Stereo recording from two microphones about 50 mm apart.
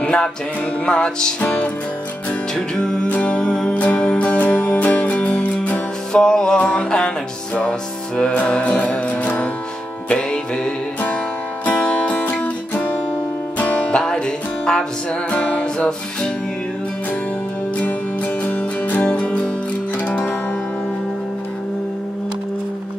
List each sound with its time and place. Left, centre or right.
0.0 s music: centre
1.4 s music: left
2.5 s music: centre
6.1 s music: centre
8.5 s music: left
10.0 s music: centre; by 13.8 s left
13.8 s music: centre
17.7 s music: left